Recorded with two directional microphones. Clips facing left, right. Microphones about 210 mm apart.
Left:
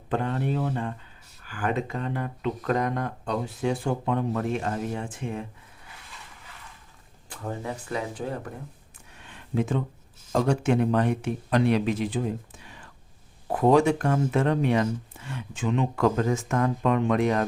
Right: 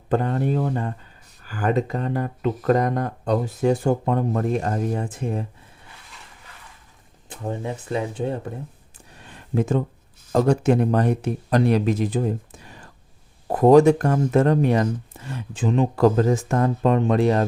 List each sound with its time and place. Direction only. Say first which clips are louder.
0.1 s speech: right 5 dB; 40° right (ahead or behind)
7.3 s speech: right 4 dB; 20° right (ahead or behind)
9.1 s a sound: right 3 dB; 40° right (ahead or behind)
10.3 s speech: right 5 dB; 40° right (ahead or behind)